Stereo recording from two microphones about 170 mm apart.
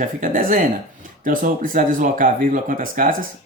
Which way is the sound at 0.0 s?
50° right (ahead or behind).